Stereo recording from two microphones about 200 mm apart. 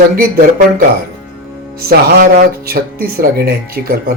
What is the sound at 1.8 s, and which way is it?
Speech, 50° right (ahead or behind).